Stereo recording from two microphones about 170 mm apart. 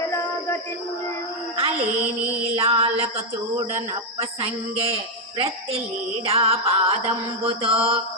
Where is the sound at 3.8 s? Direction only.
35° right (ahead or behind).